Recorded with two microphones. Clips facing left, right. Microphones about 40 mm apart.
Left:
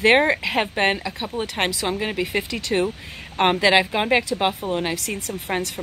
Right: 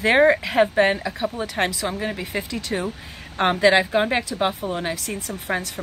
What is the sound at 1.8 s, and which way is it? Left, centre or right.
Speech, left.